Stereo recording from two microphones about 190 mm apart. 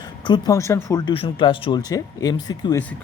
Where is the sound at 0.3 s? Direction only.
20° left (ahead or behind).